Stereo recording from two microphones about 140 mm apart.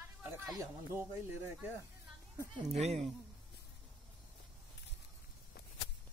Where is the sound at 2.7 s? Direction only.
50° right (ahead or behind).